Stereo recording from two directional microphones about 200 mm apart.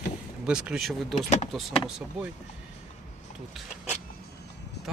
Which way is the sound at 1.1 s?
35° left (ahead or behind).